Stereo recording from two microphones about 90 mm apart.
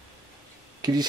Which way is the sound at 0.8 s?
50° right (ahead or behind).